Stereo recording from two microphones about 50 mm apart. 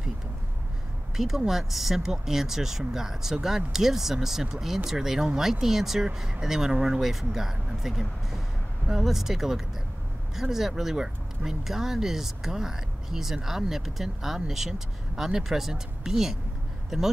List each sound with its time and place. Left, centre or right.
1.1 s speech: centre